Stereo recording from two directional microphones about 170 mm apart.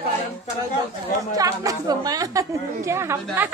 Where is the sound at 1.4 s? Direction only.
20° right (ahead or behind).